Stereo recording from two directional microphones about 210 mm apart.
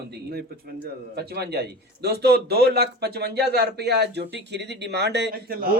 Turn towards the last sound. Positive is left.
turn(degrees=-45)  # may be behind; listen again after turning